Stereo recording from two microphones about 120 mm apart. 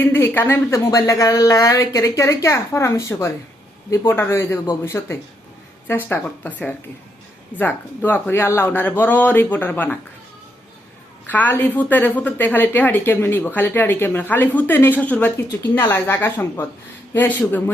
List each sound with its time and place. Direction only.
0.0 s a woman's voice: 20° left (ahead or behind)
11.3 s a woman's voice: 15° left (ahead or behind)